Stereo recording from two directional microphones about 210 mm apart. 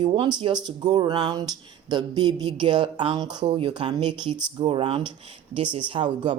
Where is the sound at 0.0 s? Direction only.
25° right (ahead or behind).